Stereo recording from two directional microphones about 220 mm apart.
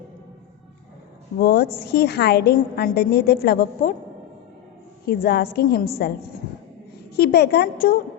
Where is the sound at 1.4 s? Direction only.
45° left (ahead or behind).